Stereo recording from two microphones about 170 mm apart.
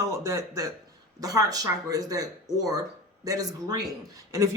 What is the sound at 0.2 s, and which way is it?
A woman's voice, 15° right (ahead or behind).